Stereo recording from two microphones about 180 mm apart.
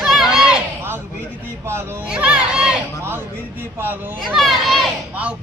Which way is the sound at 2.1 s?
5° right (ahead or behind).